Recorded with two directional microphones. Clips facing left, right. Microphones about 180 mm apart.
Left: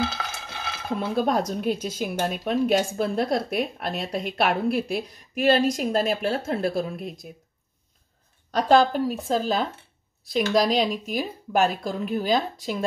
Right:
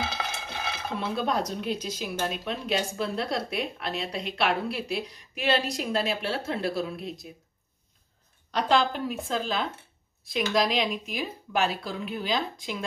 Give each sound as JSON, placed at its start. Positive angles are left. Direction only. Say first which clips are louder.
{"t": 0.1, "sound": "stir", "louder": "right 1 dB", "side_deg": -10}
{"t": 0.9, "sound": "speech", "louder": "left 5 dB", "side_deg": 45}
{"t": 8.5, "sound": "a woman's voice", "louder": "left 6 dB", "side_deg": 45}